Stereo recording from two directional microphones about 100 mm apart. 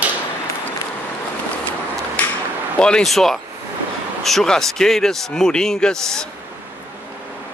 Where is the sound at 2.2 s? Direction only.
15° left (ahead or behind).